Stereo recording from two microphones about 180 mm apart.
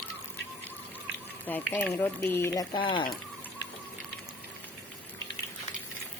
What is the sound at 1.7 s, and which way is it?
Speech, 10° left (ahead or behind).